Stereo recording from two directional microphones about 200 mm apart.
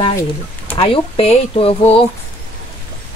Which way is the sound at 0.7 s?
30° left (ahead or behind).